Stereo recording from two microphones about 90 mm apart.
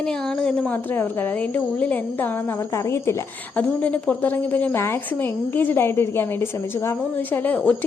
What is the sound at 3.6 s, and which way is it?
A woman's voice, 15° left (ahead or behind).